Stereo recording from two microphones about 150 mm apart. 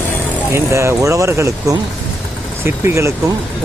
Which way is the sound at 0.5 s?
20° right (ahead or behind).